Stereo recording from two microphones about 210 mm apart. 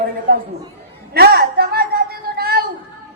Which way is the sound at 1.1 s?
45° right (ahead or behind).